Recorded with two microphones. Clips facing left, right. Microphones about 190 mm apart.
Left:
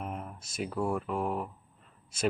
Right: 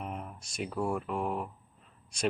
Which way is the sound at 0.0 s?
Centre (ahead or behind).